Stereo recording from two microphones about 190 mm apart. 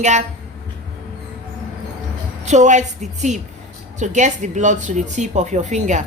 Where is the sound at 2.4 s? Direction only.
40° right (ahead or behind).